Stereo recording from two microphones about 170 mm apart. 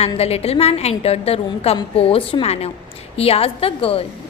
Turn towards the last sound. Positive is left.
turn(degrees=35)  # may be behind; listen again after turning